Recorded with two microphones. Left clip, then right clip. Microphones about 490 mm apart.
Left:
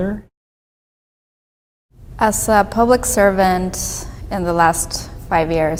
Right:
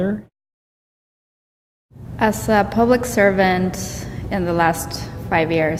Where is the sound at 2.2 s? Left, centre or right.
Left.